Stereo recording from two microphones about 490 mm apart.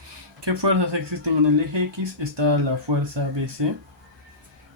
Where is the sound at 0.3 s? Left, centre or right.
Right.